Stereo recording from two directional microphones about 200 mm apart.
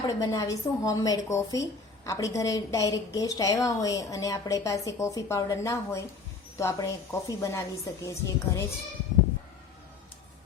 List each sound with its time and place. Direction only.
0.1 s a woman's voice: 15° left (ahead or behind)